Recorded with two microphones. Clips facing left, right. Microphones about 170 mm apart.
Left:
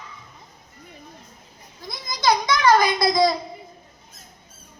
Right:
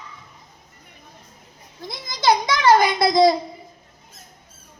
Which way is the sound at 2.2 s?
25° right (ahead or behind).